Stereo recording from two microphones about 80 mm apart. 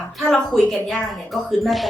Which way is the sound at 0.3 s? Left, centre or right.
Centre.